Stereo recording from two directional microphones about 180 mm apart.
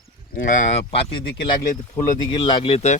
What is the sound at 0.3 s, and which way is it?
Speech, 45° left (ahead or behind).